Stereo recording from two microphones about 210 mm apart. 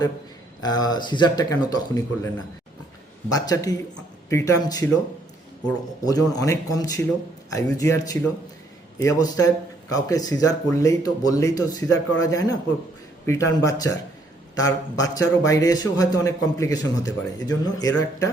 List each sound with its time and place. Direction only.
0.6 s speech: 20° left (ahead or behind)
3.2 s speech: 15° left (ahead or behind)
6.1 s speech: 15° left (ahead or behind)